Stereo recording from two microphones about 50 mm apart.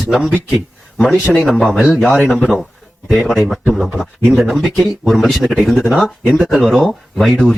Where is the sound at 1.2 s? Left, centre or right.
Left.